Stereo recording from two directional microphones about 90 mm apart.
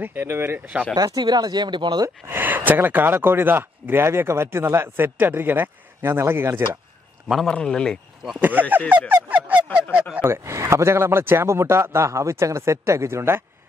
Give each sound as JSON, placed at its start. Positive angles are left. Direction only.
{"t": 0.0, "sound": "speech", "side_deg": -25}
{"t": 0.9, "sound": "speech", "side_deg": -50}
{"t": 2.0, "sound": "speech", "side_deg": -25}
{"t": 7.4, "sound": "speech", "side_deg": 10}
{"t": 8.4, "sound": "speech", "side_deg": -20}
{"t": 9.1, "sound": "a sound", "side_deg": -15}
{"t": 10.1, "sound": "a man's voice", "side_deg": -25}